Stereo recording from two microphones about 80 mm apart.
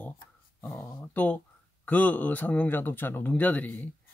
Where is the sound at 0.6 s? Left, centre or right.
Left.